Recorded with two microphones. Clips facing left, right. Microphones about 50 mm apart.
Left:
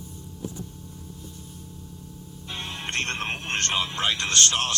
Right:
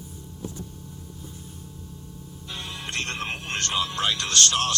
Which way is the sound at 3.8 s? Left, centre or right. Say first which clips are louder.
Even; left.